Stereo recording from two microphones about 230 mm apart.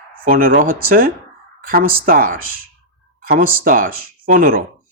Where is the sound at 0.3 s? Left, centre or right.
Right.